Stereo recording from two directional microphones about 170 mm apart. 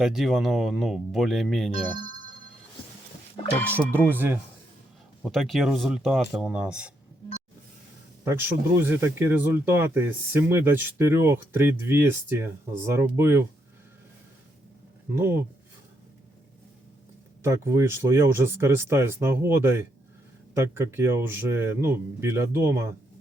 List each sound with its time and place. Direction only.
0.0 s speech: centre (ahead or behind)
3.7 s speech: 15° right (ahead or behind)
5.2 s speech: centre (ahead or behind)
8.2 s speech: 15° right (ahead or behind)
15.1 s speech: 15° right (ahead or behind)
17.4 s speech: 15° right (ahead or behind)